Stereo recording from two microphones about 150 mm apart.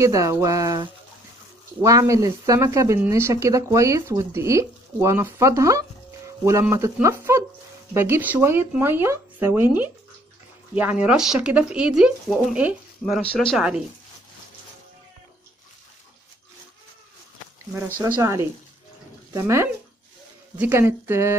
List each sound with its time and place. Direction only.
0.0 s speech: 20° right (ahead or behind); by 13.6 s 5° left (ahead or behind)
13.6 s speech: 5° right (ahead or behind)
17.9 s speech: 20° right (ahead or behind)